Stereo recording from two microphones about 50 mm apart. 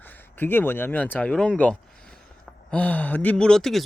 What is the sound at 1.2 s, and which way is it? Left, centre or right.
Speech, left.